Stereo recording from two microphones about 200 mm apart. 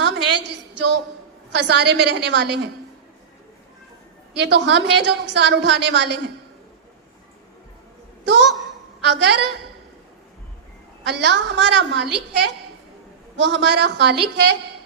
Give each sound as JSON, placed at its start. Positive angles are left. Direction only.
{"t": 0.0, "sound": "a sound", "side_deg": -60}
{"t": 1.5, "sound": "a woman's voice", "side_deg": -60}
{"t": 4.4, "sound": "a woman's voice", "side_deg": -60}
{"t": 8.2, "sound": "a woman's voice", "side_deg": -60}
{"t": 11.0, "sound": "a woman's voice", "side_deg": -60}